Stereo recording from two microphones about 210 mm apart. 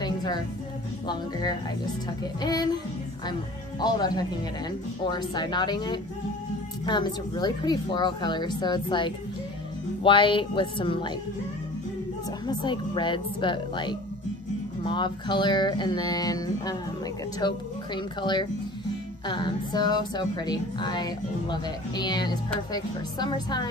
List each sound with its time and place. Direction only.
0.0 s music: 20° left (ahead or behind)
1.0 s speech: 20° left (ahead or behind)
3.8 s speech: 20° left (ahead or behind)
12.4 s speech: 20° left (ahead or behind)